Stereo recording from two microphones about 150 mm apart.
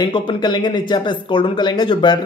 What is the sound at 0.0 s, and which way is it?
Speech, 30° left (ahead or behind).